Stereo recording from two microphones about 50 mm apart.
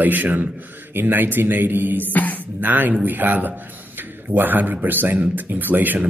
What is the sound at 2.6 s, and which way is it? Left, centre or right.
Speech, right.